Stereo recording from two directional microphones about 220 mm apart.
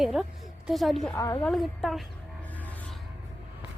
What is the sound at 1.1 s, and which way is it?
Speech, 15° left (ahead or behind).